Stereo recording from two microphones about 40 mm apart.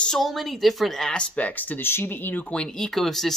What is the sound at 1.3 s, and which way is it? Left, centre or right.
Speech, left.